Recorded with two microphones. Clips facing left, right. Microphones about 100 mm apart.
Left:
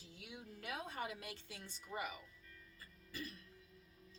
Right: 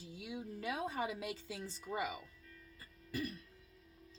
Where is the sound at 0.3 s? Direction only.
90° right.